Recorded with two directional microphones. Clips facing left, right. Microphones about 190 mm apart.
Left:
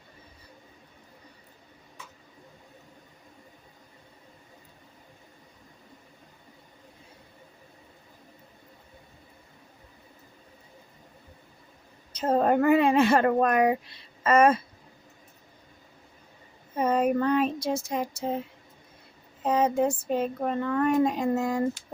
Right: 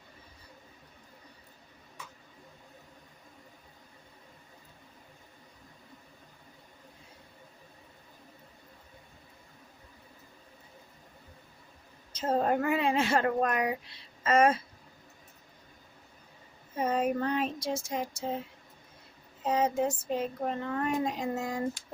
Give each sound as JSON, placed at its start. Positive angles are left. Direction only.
{"t": 12.1, "sound": "speech", "side_deg": 60}
{"t": 16.8, "sound": "child singing", "side_deg": 60}
{"t": 19.4, "sound": "speech", "side_deg": 55}